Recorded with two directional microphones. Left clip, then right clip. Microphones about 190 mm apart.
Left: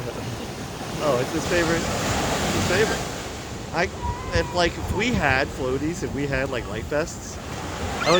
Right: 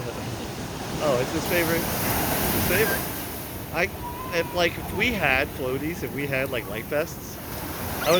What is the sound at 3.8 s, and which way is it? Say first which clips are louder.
Speech: left 1 dB; 45° left (ahead or behind).